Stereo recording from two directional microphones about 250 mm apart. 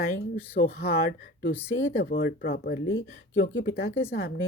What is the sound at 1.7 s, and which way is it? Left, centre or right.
Speech, left.